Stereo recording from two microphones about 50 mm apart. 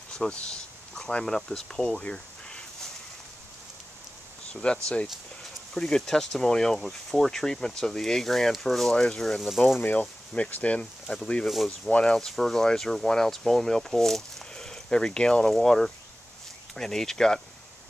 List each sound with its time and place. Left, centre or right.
0.1 s speech: centre
4.5 s speech: left
5.0 s a sound: centre
5.8 s speech: centre
9.4 s speech: centre
9.9 s speech: left
11.1 s speech: centre
11.4 s speech: centre
11.9 s speech: centre
12.2 s speech: centre